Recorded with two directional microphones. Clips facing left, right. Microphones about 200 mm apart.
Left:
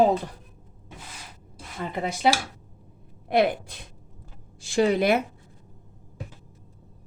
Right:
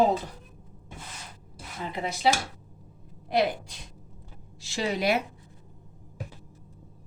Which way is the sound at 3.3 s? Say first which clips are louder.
Left 4 dB; 55° left (ahead or behind).